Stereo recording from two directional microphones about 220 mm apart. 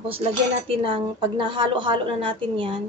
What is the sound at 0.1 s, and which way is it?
Speech, 25° right (ahead or behind).